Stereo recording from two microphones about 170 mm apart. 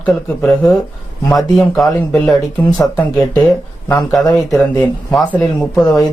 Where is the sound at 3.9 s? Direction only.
Centre (ahead or behind).